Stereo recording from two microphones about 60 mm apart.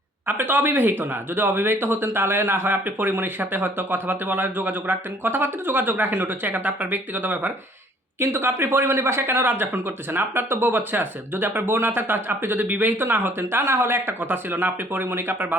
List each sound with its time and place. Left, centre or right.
0.3 s speech: right
6.5 s speech: right
8.2 s speech: right
12.6 s speech: right
13.0 s speech: right